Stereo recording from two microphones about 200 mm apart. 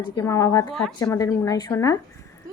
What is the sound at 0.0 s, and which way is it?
Speech, 15° left (ahead or behind).